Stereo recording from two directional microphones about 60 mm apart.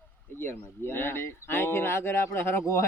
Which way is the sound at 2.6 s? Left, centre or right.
Left.